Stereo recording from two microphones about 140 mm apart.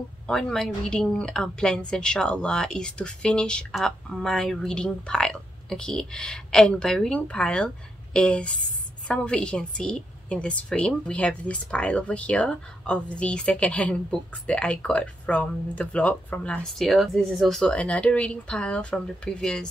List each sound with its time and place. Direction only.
0.3 s a woman's voice: 5° left (ahead or behind)